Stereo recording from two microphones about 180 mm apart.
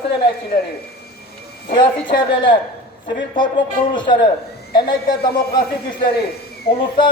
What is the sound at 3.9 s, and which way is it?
A man's voice, 25° left (ahead or behind).